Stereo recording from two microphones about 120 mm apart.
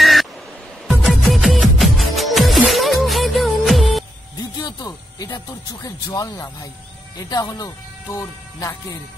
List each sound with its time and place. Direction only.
0.0 s a sound: centre (ahead or behind)
0.8 s music: centre (ahead or behind)
4.6 s music: 30° left (ahead or behind)
5.9 s speech: 30° left (ahead or behind)